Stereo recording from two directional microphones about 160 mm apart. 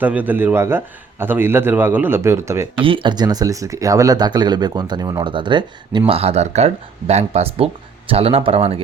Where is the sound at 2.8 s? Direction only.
30° right (ahead or behind).